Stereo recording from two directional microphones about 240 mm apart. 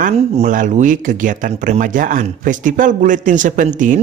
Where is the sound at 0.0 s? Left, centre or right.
Right.